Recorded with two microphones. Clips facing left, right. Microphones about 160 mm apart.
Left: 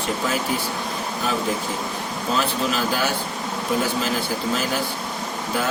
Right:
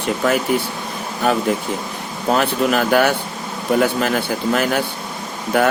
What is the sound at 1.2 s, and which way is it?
Speech, 65° right (ahead or behind).